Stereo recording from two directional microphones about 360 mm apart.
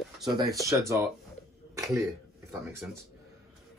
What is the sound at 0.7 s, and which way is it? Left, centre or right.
Speech, centre.